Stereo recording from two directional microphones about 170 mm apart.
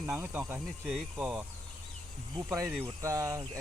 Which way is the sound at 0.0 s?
10° right (ahead or behind).